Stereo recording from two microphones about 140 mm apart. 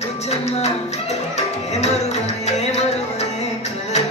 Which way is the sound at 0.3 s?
50° left (ahead or behind).